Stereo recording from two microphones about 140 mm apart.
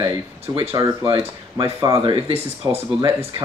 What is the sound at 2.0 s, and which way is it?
Speech, 40° right (ahead or behind).